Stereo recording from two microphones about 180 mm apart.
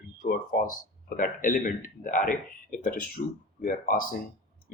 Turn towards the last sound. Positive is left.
turn(degrees=50)  # may be behind; listen again after turning